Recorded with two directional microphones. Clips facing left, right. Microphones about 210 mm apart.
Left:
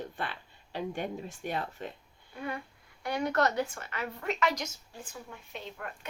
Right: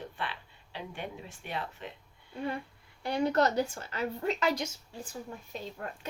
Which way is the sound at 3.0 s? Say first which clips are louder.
Right 2 dB; 30° right (ahead or behind).